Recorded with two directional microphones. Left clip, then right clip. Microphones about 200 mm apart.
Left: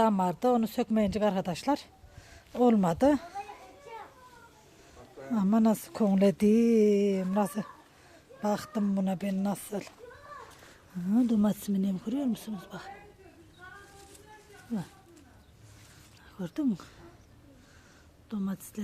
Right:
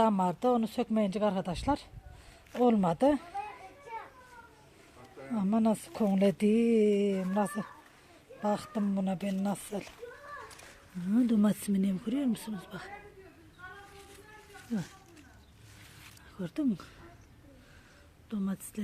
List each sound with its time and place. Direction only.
0.0 s speech: centre (ahead or behind)
5.3 s speech: 15° left (ahead or behind)
11.1 s speech: centre (ahead or behind)
14.7 s speech: 10° right (ahead or behind)
16.4 s speech: centre (ahead or behind)
18.3 s speech: centre (ahead or behind)